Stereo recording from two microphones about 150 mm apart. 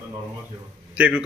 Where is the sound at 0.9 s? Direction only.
10° right (ahead or behind).